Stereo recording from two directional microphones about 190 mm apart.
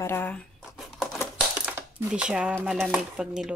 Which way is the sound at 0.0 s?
10° left (ahead or behind).